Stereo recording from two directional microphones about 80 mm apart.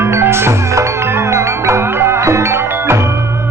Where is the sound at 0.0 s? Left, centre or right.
Right.